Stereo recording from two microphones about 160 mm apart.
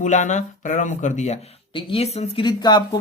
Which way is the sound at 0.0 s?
50° left (ahead or behind).